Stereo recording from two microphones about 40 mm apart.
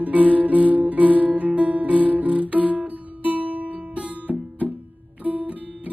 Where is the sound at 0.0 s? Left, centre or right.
Right.